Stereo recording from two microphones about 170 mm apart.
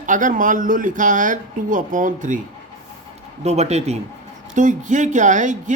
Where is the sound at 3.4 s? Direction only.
40° right (ahead or behind).